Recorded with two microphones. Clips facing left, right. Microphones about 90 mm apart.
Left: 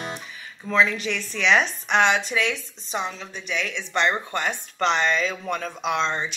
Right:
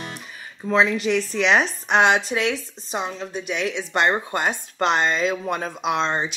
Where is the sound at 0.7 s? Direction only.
40° right (ahead or behind).